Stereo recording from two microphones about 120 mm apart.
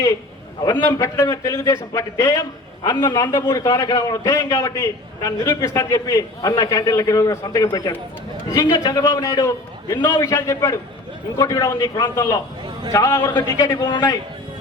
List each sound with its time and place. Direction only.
0.8 s a man's voice: 25° left (ahead or behind)
3.2 s a man's voice: 20° left (ahead or behind)
13.9 s a man's voice: 30° left (ahead or behind)